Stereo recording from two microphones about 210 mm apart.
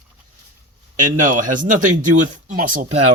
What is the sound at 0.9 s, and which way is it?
Speech, 40° right (ahead or behind).